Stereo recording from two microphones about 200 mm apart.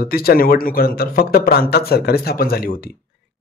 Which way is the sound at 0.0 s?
50° left (ahead or behind).